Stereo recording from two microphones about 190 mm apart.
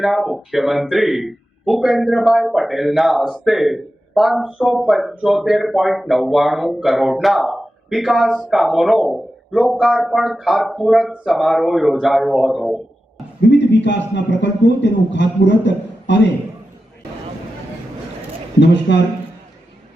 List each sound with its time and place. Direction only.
0.0 s speech: centre (ahead or behind)
13.4 s a man's voice: 65° left (ahead or behind)
18.6 s a man's voice: 65° left (ahead or behind)